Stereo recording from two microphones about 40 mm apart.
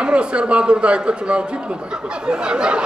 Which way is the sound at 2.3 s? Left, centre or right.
Right.